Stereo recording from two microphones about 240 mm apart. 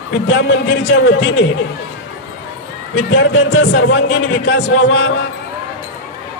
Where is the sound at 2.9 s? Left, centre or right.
Left.